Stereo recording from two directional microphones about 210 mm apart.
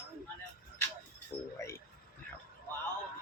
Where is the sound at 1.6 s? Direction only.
15° left (ahead or behind).